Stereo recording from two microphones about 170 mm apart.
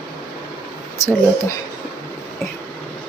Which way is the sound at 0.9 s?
15° left (ahead or behind).